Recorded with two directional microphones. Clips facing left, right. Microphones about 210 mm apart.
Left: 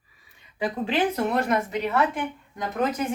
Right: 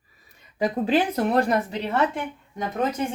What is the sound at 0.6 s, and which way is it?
Speech, 40° right (ahead or behind).